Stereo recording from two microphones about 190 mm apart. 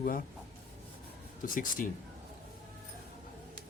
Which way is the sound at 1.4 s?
45° left (ahead or behind).